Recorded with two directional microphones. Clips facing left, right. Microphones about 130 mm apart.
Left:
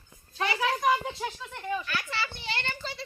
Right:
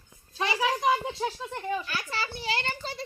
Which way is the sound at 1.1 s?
30° right (ahead or behind).